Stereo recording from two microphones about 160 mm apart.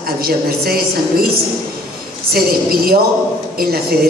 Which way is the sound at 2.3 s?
70° right (ahead or behind).